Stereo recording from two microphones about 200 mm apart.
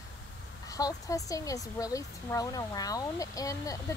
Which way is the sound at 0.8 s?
15° left (ahead or behind).